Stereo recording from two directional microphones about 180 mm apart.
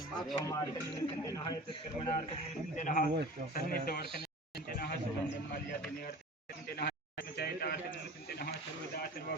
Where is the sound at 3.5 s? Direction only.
55° left (ahead or behind).